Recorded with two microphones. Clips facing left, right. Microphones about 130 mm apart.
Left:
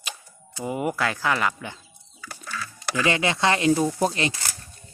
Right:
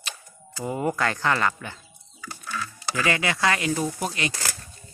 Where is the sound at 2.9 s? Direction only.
20° left (ahead or behind).